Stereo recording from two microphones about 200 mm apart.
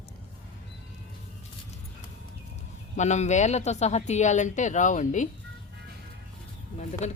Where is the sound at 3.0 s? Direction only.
35° left (ahead or behind).